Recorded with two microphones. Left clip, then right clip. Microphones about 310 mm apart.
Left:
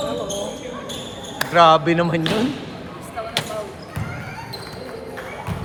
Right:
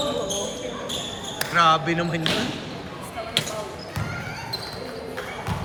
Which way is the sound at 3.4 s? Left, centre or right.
Centre.